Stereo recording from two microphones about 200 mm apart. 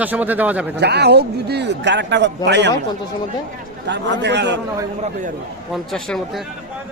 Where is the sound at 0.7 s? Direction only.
55° right (ahead or behind).